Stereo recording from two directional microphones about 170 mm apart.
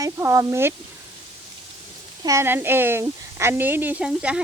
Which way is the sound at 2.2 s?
20° right (ahead or behind).